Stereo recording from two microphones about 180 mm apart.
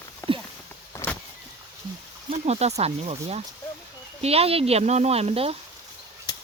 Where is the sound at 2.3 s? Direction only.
35° right (ahead or behind).